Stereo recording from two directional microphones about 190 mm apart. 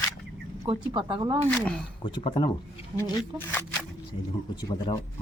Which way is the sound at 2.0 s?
25° left (ahead or behind).